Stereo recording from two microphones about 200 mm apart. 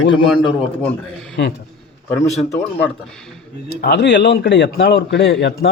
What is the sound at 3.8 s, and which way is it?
A man's voice, 60° left (ahead or behind).